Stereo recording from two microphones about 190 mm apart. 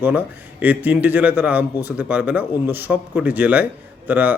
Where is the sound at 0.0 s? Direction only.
10° right (ahead or behind).